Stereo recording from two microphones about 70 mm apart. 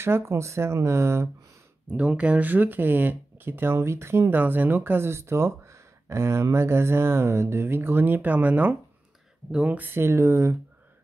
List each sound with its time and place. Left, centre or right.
0.0 s speech: right
1.9 s speech: centre; by 10.5 s right